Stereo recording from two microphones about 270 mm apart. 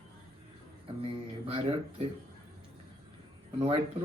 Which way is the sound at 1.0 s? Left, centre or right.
Centre.